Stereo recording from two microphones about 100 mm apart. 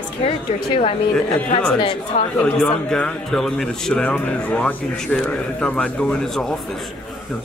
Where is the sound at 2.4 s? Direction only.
10° left (ahead or behind).